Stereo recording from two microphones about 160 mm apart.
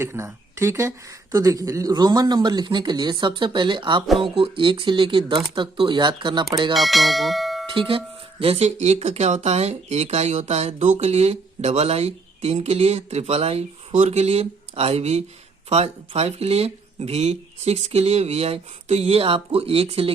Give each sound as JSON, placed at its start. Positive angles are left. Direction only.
{"t": 0.0, "sound": "speech", "side_deg": -15}
{"t": 6.7, "sound": "speech", "side_deg": 0}
{"t": 7.7, "sound": "speech", "side_deg": -30}